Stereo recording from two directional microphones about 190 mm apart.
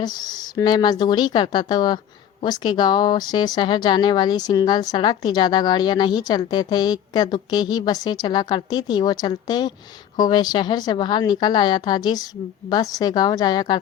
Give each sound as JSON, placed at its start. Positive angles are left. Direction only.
{"t": 0.0, "sound": "speech", "side_deg": 20}